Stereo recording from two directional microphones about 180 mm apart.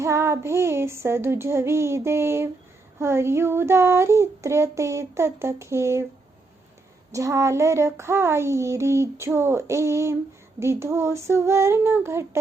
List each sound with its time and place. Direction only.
0.0 s child singing: 15° right (ahead or behind)
7.1 s child singing: 15° right (ahead or behind)